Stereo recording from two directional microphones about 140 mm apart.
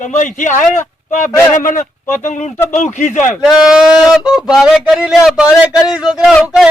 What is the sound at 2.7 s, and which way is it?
Speech, 55° left (ahead or behind).